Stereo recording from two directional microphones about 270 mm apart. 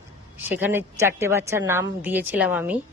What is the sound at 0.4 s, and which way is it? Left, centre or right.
A woman's voice, centre.